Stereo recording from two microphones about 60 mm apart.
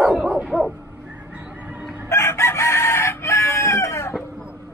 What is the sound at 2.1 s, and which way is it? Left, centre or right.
Chicken, left.